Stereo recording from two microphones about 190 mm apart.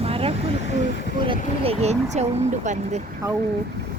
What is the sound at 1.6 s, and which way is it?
Speech, 30° right (ahead or behind).